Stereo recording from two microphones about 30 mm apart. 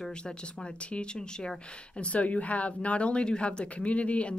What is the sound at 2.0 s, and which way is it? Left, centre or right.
A woman's voice, left.